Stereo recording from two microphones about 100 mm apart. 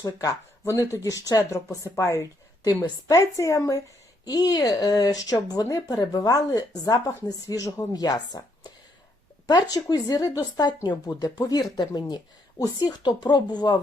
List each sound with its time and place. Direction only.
0.0 s speech: 35° left (ahead or behind)